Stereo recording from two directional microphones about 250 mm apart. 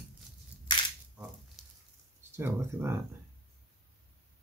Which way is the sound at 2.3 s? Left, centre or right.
Centre.